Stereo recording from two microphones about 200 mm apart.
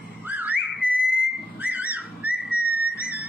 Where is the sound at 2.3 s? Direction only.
50° left (ahead or behind).